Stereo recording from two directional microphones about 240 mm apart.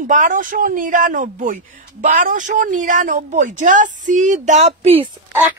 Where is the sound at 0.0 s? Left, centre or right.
Right.